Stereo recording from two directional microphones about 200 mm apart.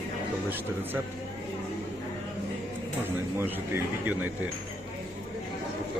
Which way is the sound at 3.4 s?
10° right (ahead or behind).